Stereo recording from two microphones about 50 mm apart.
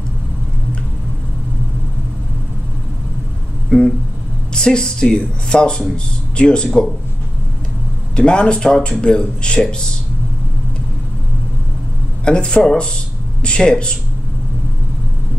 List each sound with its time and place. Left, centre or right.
4.6 s speech: centre
8.2 s speech: centre
12.3 s speech: centre